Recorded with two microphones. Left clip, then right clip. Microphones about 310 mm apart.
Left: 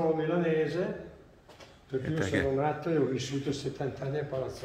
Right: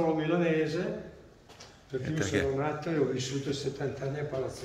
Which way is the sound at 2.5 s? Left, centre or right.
Left.